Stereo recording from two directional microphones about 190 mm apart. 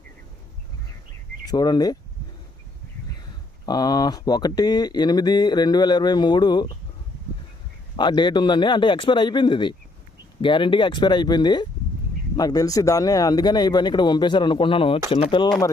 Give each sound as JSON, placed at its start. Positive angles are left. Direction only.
{"t": 1.5, "sound": "speech", "side_deg": 20}
{"t": 3.7, "sound": "speech", "side_deg": 20}
{"t": 7.9, "sound": "speech", "side_deg": 25}